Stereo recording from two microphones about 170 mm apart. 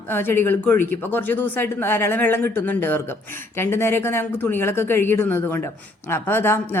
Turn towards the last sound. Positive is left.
turn(degrees=15)  # may be behind; listen again after turning